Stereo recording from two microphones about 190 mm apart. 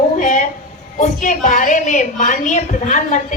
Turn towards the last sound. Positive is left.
turn(degrees=40)  # may be behind; listen again after turning